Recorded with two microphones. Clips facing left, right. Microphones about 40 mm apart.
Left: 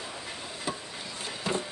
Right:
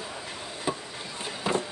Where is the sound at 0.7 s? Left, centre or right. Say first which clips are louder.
Right 4 dB; centre.